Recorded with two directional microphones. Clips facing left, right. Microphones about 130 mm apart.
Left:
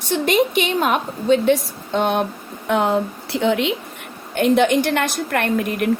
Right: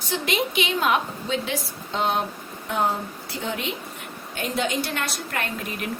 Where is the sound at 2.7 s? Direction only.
80° left.